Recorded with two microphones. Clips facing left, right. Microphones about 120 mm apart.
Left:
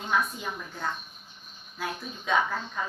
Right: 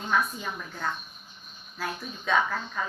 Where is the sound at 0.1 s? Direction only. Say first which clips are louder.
Right 1 dB; 15° left (ahead or behind).